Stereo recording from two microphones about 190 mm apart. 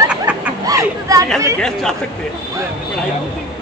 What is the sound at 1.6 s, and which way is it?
Speech, 5° left (ahead or behind).